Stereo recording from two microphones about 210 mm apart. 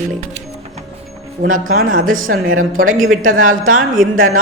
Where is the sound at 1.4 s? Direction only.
40° right (ahead or behind).